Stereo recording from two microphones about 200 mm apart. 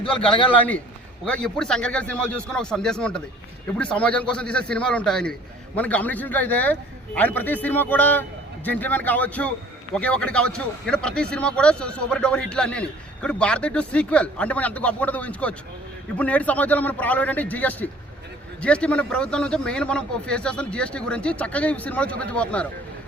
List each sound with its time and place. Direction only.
0.0 s a man's voice: 25° left (ahead or behind)
1.2 s a man's voice: 5° left (ahead or behind)